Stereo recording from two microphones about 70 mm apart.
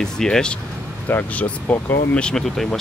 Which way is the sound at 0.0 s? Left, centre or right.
Centre.